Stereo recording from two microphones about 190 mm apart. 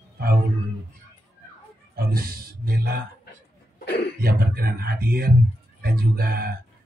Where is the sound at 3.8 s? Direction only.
60° left (ahead or behind).